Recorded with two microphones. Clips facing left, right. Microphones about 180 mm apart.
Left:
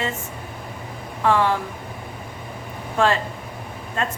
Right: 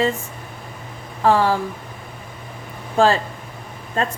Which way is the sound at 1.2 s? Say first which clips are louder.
Right 3 dB; 35° right (ahead or behind).